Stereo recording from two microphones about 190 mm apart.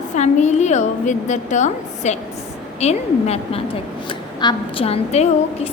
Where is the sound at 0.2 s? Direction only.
35° left (ahead or behind).